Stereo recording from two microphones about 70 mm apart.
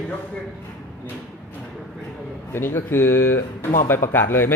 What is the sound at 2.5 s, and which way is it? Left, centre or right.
Speech, left.